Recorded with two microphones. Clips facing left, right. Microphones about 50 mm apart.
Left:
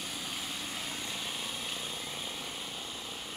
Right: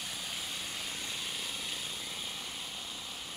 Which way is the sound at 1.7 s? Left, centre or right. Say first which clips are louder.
Left 2 dB; left.